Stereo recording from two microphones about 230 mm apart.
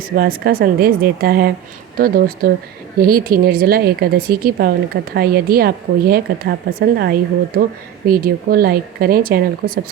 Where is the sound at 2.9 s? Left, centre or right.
Right.